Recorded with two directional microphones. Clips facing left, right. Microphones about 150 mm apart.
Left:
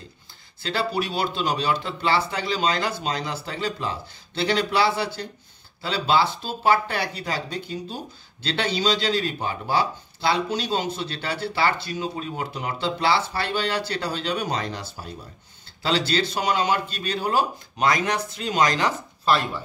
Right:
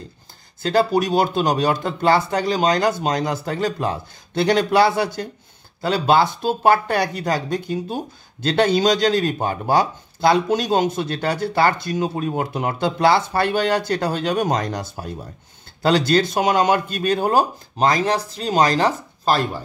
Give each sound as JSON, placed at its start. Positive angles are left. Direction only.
{"t": 0.6, "sound": "speech", "side_deg": -45}